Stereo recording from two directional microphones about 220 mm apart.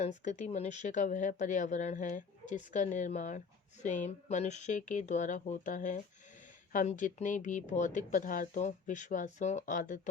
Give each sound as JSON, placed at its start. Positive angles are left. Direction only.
{"t": 0.0, "sound": "speech", "side_deg": 35}